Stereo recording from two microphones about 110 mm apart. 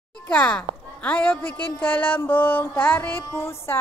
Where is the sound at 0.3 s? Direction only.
10° left (ahead or behind).